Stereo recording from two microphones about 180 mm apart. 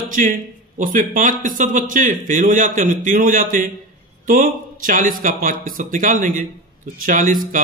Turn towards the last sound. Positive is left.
turn(degrees=-50)  # may be behind; listen again after turning